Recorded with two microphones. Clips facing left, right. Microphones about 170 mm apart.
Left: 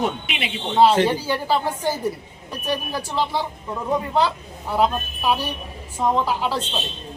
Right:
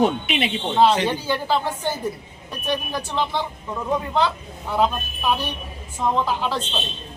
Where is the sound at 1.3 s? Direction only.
10° left (ahead or behind).